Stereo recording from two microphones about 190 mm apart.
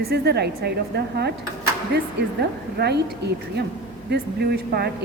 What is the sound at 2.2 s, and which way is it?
A woman's voice, 65° right (ahead or behind).